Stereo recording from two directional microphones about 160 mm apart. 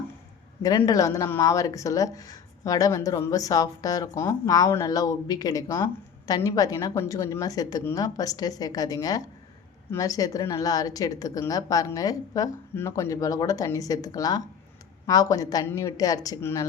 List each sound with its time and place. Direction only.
0.8 s a woman's voice: 20° left (ahead or behind)